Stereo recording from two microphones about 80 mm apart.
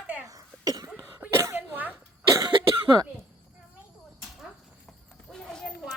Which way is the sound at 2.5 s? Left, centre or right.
Right.